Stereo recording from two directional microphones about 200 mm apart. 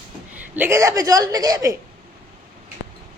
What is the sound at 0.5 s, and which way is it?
A woman's voice, 10° right (ahead or behind).